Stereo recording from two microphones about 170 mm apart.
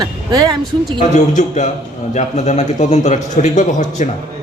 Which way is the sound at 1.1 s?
45° left (ahead or behind).